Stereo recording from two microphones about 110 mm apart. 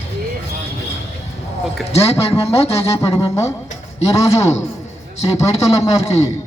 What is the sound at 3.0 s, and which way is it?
Speech, 30° left (ahead or behind).